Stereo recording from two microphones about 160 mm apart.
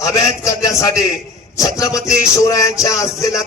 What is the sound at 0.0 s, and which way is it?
A man's voice, 20° left (ahead or behind).